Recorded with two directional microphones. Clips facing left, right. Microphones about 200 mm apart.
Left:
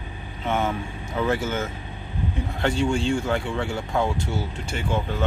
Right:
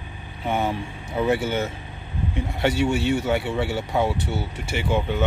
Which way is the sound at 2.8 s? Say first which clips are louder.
Even; 5° right (ahead or behind).